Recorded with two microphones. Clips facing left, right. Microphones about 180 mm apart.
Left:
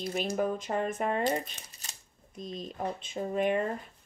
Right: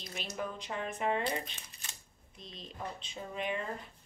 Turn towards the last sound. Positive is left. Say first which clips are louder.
# left 9 dB
turn(degrees=50)  # may be behind; listen again after turning